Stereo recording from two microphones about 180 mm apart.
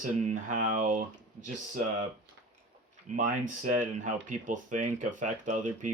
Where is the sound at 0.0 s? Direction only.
45° right (ahead or behind).